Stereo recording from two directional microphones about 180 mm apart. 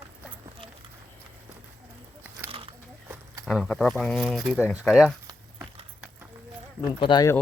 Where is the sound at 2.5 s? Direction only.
30° right (ahead or behind).